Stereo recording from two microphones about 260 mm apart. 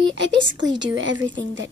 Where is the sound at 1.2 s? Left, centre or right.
Right.